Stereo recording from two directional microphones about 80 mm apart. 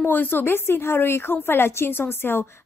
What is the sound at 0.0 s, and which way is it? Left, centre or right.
A woman's voice, left.